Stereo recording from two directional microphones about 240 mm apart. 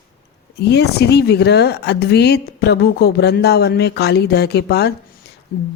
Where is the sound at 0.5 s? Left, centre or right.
Left.